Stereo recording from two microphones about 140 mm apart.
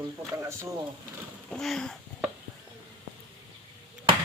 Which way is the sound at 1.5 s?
5° left (ahead or behind).